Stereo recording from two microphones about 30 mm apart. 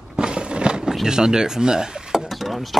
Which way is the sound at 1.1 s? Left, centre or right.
Right.